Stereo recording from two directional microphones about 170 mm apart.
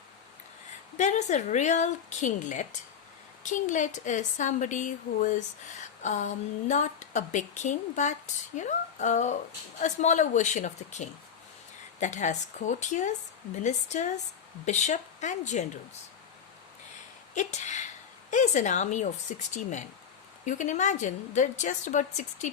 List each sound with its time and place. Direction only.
0.9 s speech: 45° left (ahead or behind)
17.3 s speech: 45° left (ahead or behind)